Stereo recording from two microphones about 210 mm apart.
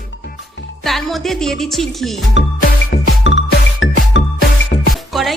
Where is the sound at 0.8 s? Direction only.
Centre (ahead or behind).